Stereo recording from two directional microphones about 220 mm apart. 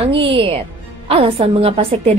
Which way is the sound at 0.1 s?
25° right (ahead or behind).